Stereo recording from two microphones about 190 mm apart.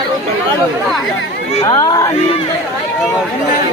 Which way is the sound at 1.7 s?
20° left (ahead or behind).